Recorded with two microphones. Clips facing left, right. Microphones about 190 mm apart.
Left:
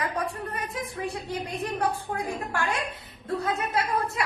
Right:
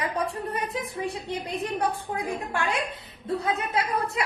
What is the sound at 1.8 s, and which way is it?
A woman's voice, 15° right (ahead or behind).